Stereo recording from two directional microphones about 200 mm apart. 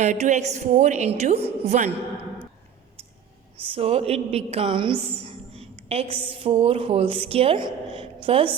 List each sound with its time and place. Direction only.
0.0 s a woman's voice: 35° right (ahead or behind)
3.7 s a woman's voice: 30° right (ahead or behind)